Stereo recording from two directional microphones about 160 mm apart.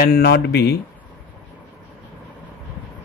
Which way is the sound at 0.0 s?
70° left (ahead or behind).